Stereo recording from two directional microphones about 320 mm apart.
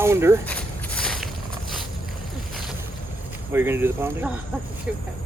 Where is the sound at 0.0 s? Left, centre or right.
Centre.